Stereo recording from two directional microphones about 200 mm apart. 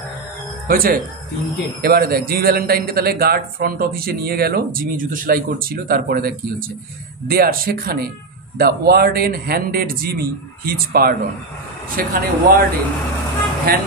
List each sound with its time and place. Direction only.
0.7 s a man's voice: 45° right (ahead or behind)
13.7 s a man's voice: 50° right (ahead or behind)